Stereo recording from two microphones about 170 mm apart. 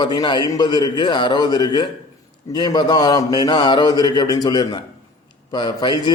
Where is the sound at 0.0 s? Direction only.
25° left (ahead or behind).